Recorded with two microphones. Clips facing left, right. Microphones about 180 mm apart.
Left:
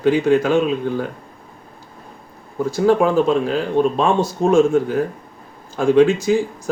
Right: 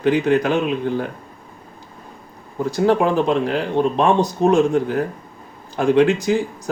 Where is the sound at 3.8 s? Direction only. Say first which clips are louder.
Even; 20° right (ahead or behind).